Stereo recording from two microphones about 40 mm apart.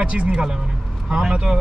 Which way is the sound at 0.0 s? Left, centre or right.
Right.